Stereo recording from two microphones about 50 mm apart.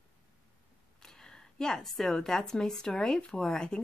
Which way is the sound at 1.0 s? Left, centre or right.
Centre.